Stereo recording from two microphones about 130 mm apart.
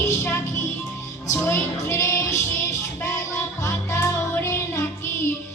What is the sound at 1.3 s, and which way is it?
Music, 20° left (ahead or behind).